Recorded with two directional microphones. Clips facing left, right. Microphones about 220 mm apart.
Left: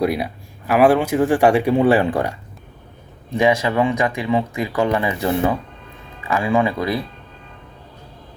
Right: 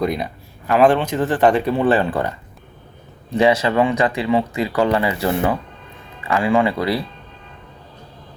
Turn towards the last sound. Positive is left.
turn(degrees=20)  # may be behind; listen again after turning